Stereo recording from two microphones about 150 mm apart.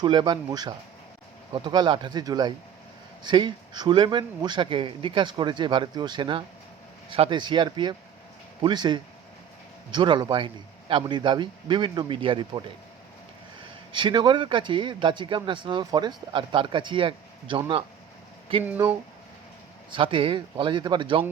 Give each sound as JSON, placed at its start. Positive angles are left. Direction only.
{"t": 0.0, "sound": "speech", "side_deg": -30}
{"t": 13.9, "sound": "speech", "side_deg": -30}
{"t": 19.9, "sound": "speech", "side_deg": -35}